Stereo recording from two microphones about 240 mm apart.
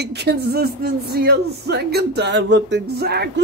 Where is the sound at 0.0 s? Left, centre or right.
Right.